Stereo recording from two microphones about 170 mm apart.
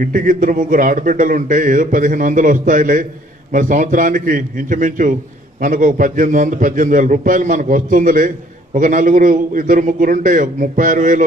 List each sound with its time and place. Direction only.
0.0 s speech: 55° right (ahead or behind)